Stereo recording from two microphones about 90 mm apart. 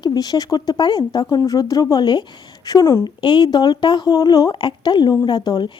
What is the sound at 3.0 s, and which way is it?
Speech, 55° left (ahead or behind).